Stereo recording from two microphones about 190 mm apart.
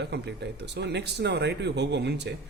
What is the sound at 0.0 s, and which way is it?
A man's voice, 60° right (ahead or behind).